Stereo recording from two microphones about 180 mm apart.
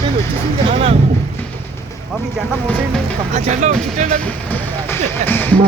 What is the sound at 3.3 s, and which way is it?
Speech, 40° right (ahead or behind).